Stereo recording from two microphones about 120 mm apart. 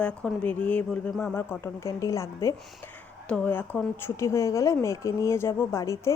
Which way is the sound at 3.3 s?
15° left (ahead or behind).